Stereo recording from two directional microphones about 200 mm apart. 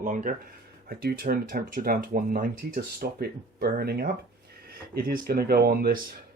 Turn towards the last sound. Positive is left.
turn(degrees=-50)  # may be behind; listen again after turning